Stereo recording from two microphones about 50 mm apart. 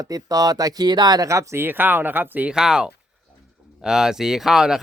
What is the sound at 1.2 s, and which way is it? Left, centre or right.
Speech, right.